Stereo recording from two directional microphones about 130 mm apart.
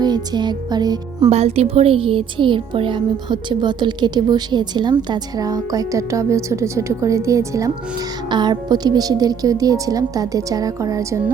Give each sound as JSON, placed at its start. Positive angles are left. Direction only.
{"t": 0.0, "sound": "music", "side_deg": -35}
{"t": 1.3, "sound": "a woman's voice", "side_deg": -55}